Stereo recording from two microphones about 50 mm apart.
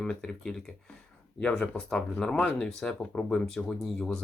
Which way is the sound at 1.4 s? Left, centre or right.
Left.